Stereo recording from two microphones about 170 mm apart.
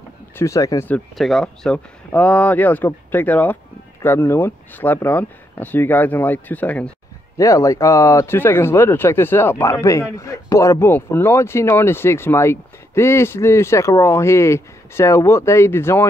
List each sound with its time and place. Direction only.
0.4 s speech: 20° left (ahead or behind)
0.8 s speech: 5° left (ahead or behind)